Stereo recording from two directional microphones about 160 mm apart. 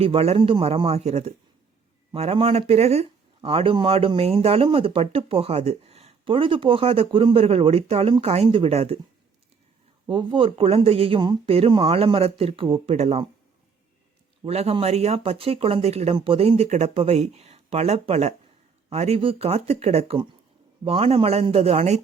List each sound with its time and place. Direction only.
0.0 s speech: 40° right (ahead or behind)
10.1 s speech: 30° right (ahead or behind)
14.4 s speech: 40° right (ahead or behind)